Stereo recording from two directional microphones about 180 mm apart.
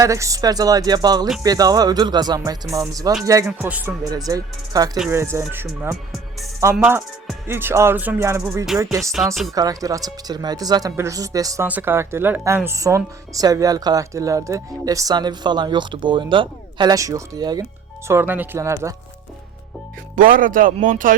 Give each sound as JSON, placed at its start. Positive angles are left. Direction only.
{"t": 0.0, "sound": "speech", "side_deg": -15}
{"t": 3.6, "sound": "music", "side_deg": -10}
{"t": 4.0, "sound": "speech", "side_deg": -20}
{"t": 4.9, "sound": "music", "side_deg": -10}
{"t": 9.1, "sound": "speech", "side_deg": 0}
{"t": 9.6, "sound": "speech", "side_deg": -20}
{"t": 18.1, "sound": "music", "side_deg": -10}
{"t": 20.1, "sound": "speech", "side_deg": -50}